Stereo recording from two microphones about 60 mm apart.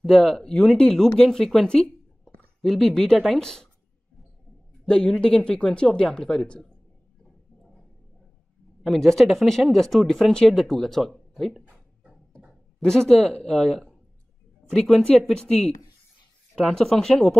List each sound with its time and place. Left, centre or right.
0.0 s speech: centre
4.8 s speech: centre
8.8 s speech: centre
12.8 s speech: centre
16.5 s speech: centre